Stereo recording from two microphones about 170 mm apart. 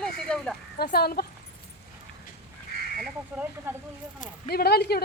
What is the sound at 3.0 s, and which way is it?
Speech, 10° right (ahead or behind).